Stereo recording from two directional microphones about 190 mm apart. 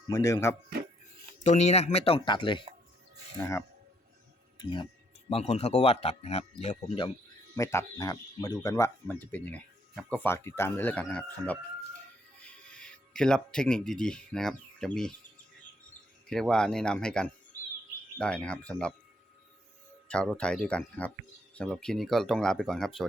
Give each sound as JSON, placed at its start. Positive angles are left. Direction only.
{"t": 0.1, "sound": "speech", "side_deg": 15}
{"t": 1.5, "sound": "speech", "side_deg": 35}
{"t": 3.3, "sound": "speech", "side_deg": 15}
{"t": 4.6, "sound": "speech", "side_deg": 25}
{"t": 7.5, "sound": "speech", "side_deg": 15}
{"t": 16.3, "sound": "speech", "side_deg": 5}
{"t": 20.1, "sound": "speech", "side_deg": 5}